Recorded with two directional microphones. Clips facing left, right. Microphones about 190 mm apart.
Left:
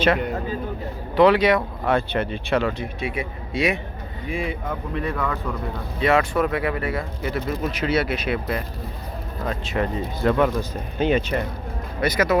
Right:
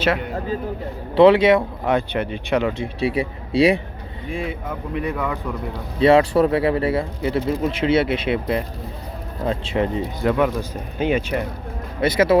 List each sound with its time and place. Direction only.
1.1 s speech: 25° right (ahead or behind)
4.3 s speech: centre (ahead or behind)
4.9 s speech: 15° right (ahead or behind)
6.0 s speech: 30° right (ahead or behind); by 11.4 s 10° right (ahead or behind)
11.9 s speech: 25° right (ahead or behind)